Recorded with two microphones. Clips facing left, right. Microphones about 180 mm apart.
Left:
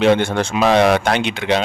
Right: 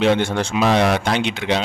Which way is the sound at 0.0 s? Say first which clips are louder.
Left 3 dB; 55° left (ahead or behind).